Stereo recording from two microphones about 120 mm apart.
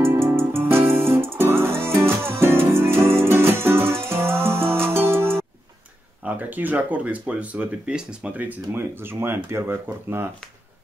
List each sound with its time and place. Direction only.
0.0 s music: 20° right (ahead or behind)
6.2 s speech: 15° right (ahead or behind)